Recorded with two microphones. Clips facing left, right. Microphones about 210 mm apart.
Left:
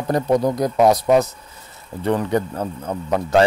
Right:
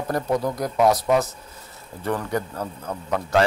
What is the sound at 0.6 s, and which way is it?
A man's voice, 20° left (ahead or behind).